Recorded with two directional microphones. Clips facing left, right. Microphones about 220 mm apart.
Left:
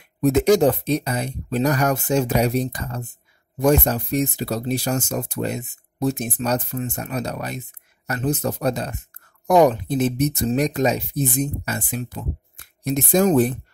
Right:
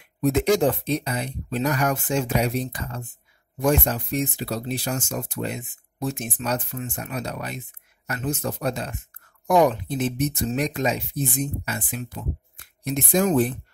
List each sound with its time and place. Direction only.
0.2 s speech: 40° left (ahead or behind)